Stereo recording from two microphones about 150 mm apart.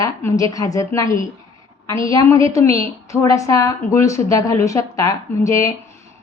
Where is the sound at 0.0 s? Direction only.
20° left (ahead or behind).